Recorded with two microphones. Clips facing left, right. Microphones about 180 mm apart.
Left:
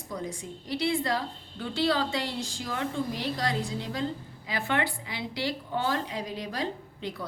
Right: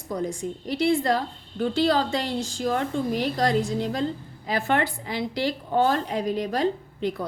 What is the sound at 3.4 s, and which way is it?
A woman's voice, 45° right (ahead or behind).